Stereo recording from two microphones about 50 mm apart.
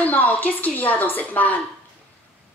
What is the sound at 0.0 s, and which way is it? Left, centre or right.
Speech, left.